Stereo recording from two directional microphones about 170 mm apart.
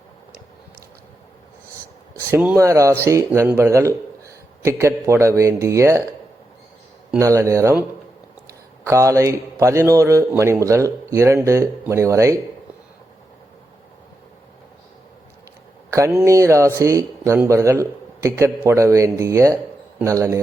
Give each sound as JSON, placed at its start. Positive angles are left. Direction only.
{"t": 2.3, "sound": "speech", "side_deg": -10}
{"t": 7.2, "sound": "speech", "side_deg": -20}
{"t": 15.9, "sound": "a man's voice", "side_deg": -15}